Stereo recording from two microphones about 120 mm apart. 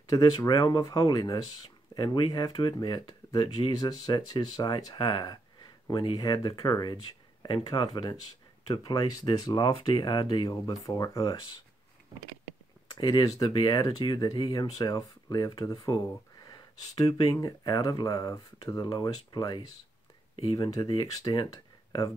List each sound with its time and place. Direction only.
0.4 s speech: 40° left (ahead or behind)
12.9 s speech: 35° left (ahead or behind)
20.7 s speech: 35° left (ahead or behind)